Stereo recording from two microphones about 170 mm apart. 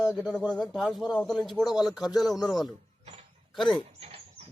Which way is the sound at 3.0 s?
35° right (ahead or behind).